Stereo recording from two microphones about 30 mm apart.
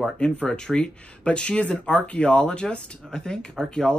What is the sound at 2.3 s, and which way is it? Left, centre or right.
Speech, left.